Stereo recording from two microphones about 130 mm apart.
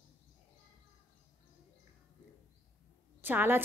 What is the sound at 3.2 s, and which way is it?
Speech, 15° right (ahead or behind).